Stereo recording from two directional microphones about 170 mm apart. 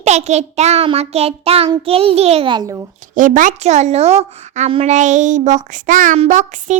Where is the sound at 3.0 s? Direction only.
50° right (ahead or behind).